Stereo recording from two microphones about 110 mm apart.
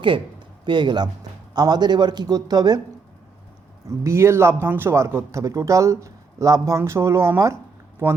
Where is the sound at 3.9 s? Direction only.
25° right (ahead or behind).